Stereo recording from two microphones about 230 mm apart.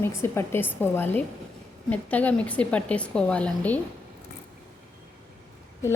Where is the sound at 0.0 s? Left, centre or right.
Centre.